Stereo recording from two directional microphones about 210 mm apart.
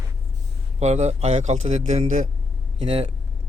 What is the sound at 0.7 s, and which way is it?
Speech, 30° right (ahead or behind).